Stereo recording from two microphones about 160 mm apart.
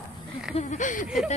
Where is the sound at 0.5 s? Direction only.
50° left (ahead or behind).